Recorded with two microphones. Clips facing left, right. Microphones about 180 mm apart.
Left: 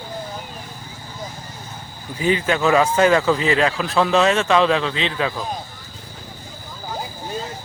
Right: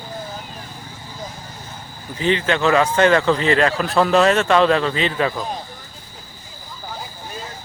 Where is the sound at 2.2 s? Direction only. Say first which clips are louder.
Even; 10° left (ahead or behind).